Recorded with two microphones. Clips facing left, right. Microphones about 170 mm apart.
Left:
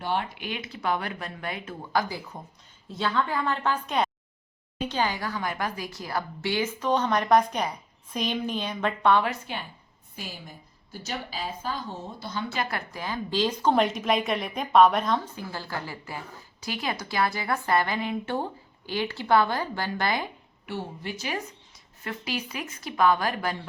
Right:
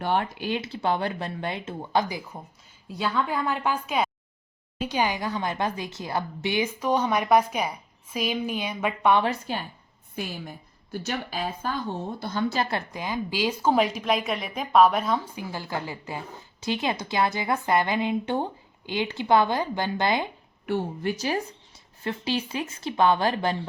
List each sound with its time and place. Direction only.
0.0 s speech: 55° right (ahead or behind)
0.3 s a woman's voice: 30° right (ahead or behind); by 9.2 s 10° right (ahead or behind)
9.2 s a woman's voice: 40° right (ahead or behind)
11.0 s speech: 55° right (ahead or behind)
12.5 s a woman's voice: 25° right (ahead or behind)
20.7 s speech: 50° right (ahead or behind)
22.0 s a woman's voice: 30° right (ahead or behind)